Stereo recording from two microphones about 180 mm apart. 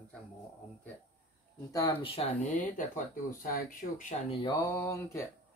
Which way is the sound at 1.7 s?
20° left (ahead or behind).